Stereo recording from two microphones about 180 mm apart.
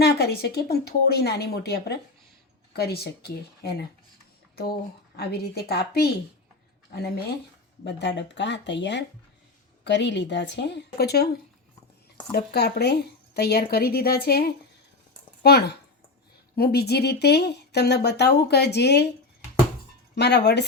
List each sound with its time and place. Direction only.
0.0 s speech: 65° left (ahead or behind)
5.1 s a woman's voice: 60° left (ahead or behind)
12.5 s speech: 65° left (ahead or behind)
20.1 s a woman's voice: 70° left (ahead or behind)